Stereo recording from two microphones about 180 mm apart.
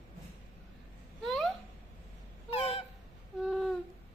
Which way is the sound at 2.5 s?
35° left (ahead or behind).